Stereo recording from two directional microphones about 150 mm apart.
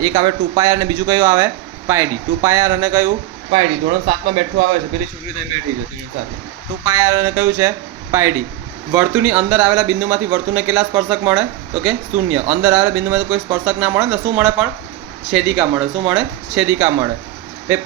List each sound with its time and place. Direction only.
0.0 s speech: 25° right (ahead or behind)
3.5 s speech: 40° right (ahead or behind)
6.8 s speech: 20° right (ahead or behind)